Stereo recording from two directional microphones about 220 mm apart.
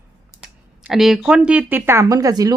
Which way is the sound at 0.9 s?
Centre (ahead or behind).